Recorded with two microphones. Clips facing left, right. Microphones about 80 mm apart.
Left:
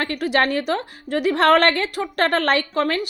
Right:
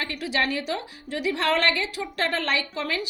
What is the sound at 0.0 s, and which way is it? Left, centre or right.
A woman's voice, left.